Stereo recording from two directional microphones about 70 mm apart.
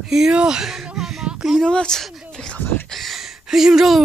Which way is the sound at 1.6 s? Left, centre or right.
Centre.